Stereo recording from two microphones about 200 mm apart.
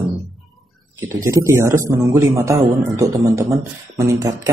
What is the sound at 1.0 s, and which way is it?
A man's voice, 15° right (ahead or behind).